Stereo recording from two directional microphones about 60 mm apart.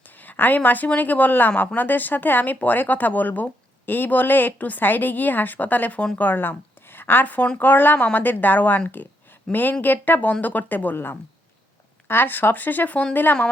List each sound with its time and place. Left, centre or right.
0.2 s a woman's voice: left